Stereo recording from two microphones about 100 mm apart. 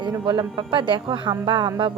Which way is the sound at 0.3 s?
55° right (ahead or behind).